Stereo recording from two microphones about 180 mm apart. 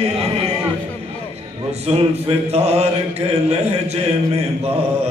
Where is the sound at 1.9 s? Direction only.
35° right (ahead or behind).